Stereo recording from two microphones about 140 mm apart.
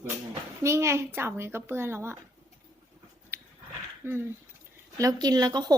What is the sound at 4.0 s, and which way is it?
Speech, 15° right (ahead or behind).